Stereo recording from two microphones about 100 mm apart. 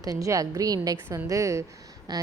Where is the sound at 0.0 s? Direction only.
35° right (ahead or behind).